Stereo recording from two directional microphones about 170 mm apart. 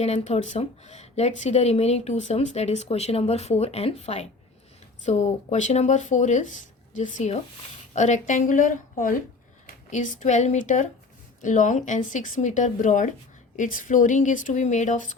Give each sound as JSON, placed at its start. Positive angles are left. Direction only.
{"t": 0.0, "sound": "speech", "side_deg": 40}